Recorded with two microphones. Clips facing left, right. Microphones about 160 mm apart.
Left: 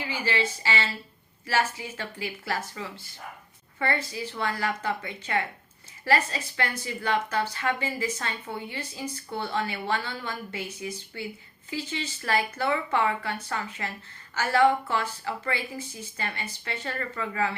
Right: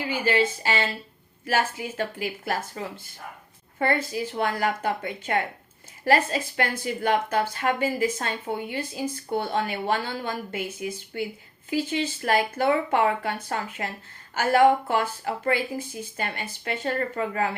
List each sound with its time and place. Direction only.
0.3 s speech: 50° right (ahead or behind)